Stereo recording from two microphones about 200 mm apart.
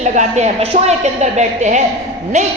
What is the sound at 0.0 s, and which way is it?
A man's voice, 35° right (ahead or behind).